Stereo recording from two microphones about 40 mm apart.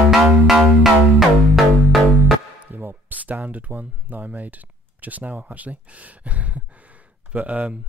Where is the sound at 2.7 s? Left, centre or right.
Right.